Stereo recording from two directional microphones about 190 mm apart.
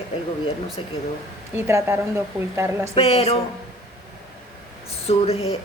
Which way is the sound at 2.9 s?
30° left (ahead or behind).